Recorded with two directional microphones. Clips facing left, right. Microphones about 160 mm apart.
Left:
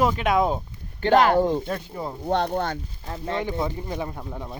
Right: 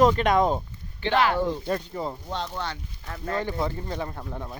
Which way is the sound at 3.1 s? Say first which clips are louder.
Left 1 dB; 25° left (ahead or behind).